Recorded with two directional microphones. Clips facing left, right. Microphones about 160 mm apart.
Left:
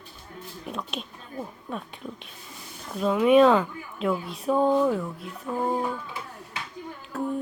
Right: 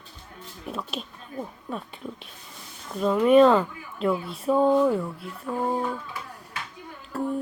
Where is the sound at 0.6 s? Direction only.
5° right (ahead or behind).